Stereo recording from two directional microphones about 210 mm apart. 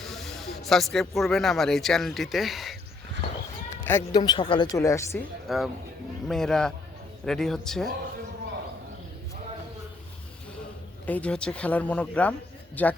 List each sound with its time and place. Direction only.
0.0 s speech: centre (ahead or behind)
3.8 s speech: 10° left (ahead or behind)
4.2 s speech: 25° left (ahead or behind)
5.5 s speech: centre (ahead or behind)
11.0 s speech: 5° left (ahead or behind)